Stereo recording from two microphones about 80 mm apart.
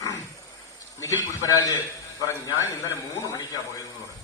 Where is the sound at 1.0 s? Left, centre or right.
Left.